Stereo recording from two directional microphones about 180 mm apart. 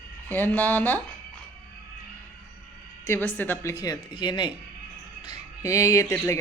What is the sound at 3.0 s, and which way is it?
A woman's voice, 10° left (ahead or behind).